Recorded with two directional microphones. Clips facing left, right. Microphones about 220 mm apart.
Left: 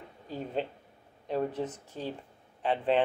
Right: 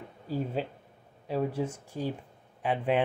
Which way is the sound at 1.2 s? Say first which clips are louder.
Right 1 dB; 5° right (ahead or behind).